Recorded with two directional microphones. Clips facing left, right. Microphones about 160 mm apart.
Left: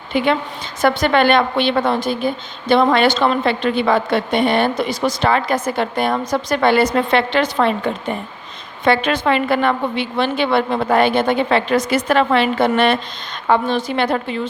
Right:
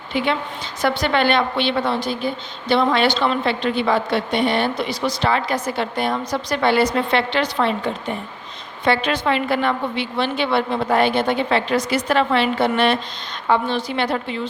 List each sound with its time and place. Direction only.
0.1 s a woman's voice: 50° left (ahead or behind)
8.9 s a woman's voice: 50° left (ahead or behind)